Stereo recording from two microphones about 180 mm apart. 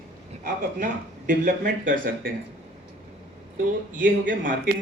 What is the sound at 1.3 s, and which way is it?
Speech, 60° right (ahead or behind).